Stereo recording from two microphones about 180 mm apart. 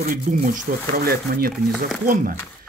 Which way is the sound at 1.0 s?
60° right (ahead or behind).